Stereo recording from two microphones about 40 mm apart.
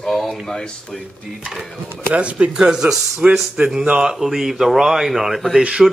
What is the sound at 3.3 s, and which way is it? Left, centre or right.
Speech, centre.